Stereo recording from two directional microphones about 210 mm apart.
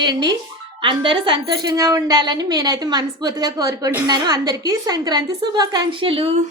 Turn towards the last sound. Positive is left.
turn(degrees=-25)  # may be behind; listen again after turning